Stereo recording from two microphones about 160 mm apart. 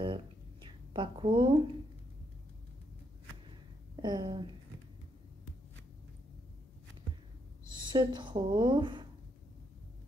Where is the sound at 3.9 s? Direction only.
25° right (ahead or behind).